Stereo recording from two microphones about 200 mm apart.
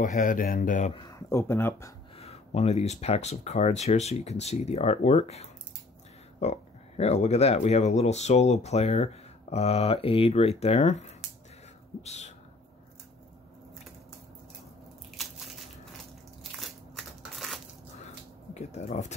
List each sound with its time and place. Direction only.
0.0 s speech: 40° left (ahead or behind)
0.9 s speech: 15° left (ahead or behind)
2.1 s speech: 30° left (ahead or behind)
12.0 s a sound: 35° left (ahead or behind)
16.5 s crushing: centre (ahead or behind)
18.5 s speech: 35° left (ahead or behind)